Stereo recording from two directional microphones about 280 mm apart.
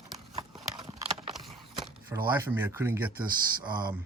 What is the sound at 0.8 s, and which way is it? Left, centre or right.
Clip-clop, right.